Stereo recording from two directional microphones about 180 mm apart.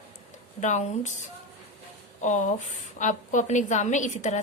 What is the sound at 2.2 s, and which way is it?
A woman's voice, 45° left (ahead or behind).